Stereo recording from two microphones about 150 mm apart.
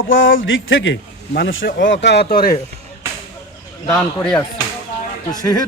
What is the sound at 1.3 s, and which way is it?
Speech, 90° left.